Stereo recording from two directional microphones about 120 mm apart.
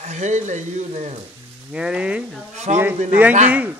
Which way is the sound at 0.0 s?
75° right (ahead or behind).